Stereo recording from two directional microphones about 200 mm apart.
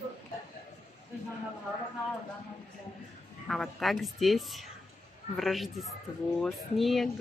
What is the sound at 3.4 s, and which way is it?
Speech, centre (ahead or behind).